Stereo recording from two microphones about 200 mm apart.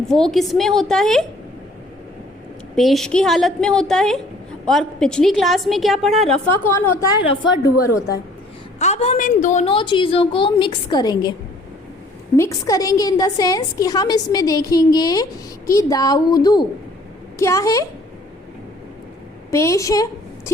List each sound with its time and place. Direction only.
0.1 s a woman's voice: centre (ahead or behind)
2.7 s a woman's voice: centre (ahead or behind)
6.7 s a woman's voice: 20° left (ahead or behind)
8.8 s a woman's voice: 35° left (ahead or behind)
12.4 s a woman's voice: 15° left (ahead or behind)
19.5 s a woman's voice: 15° left (ahead or behind)